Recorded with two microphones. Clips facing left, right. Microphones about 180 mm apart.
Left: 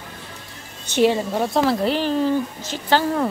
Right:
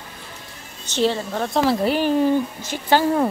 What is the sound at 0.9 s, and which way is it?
Speech, 15° left (ahead or behind).